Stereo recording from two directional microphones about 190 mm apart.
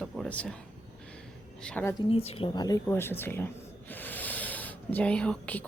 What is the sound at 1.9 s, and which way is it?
Speech, 30° left (ahead or behind).